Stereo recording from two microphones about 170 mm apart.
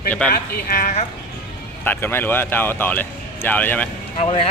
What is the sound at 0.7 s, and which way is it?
Speech, 50° left (ahead or behind).